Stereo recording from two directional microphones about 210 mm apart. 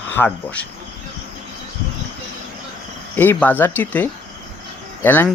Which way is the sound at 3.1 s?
10° left (ahead or behind).